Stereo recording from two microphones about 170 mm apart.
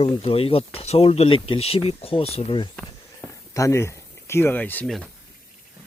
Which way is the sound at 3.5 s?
15° left (ahead or behind).